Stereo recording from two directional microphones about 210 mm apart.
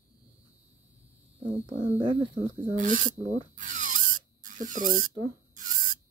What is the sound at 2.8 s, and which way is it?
Speech, 40° right (ahead or behind).